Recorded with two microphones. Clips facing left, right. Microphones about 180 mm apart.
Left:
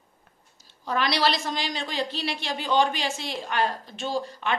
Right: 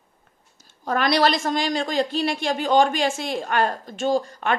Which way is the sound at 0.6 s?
45° right (ahead or behind).